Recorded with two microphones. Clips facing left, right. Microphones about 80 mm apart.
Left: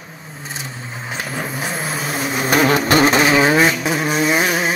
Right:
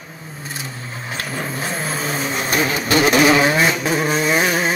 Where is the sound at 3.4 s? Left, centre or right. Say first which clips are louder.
Left 2 dB; left.